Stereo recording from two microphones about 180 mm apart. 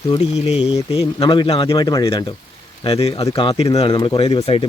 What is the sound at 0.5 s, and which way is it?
Speech, 5° right (ahead or behind).